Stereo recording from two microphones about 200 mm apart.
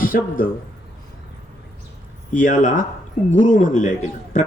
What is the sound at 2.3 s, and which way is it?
Speech, 40° left (ahead or behind).